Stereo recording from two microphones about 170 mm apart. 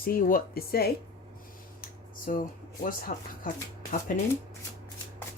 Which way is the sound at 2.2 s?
55° left (ahead or behind).